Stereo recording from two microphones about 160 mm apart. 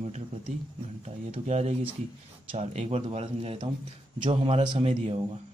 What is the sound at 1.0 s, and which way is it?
Speech, 45° right (ahead or behind).